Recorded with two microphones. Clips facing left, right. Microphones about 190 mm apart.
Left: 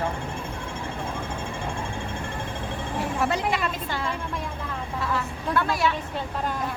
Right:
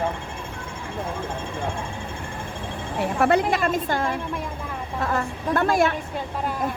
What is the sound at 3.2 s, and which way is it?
A woman's voice, 50° right (ahead or behind).